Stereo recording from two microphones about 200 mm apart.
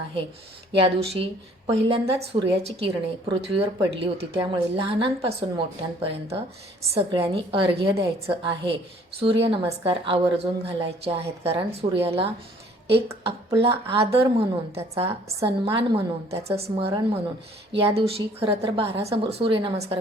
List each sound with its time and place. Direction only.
0.8 s a woman's voice: 25° right (ahead or behind)